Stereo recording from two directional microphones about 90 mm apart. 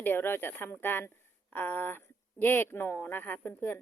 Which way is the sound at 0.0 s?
25° left (ahead or behind).